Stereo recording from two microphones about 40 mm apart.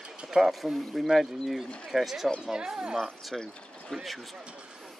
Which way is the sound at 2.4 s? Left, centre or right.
Centre.